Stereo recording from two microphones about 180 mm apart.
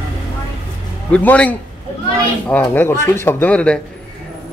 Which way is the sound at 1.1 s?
5° left (ahead or behind).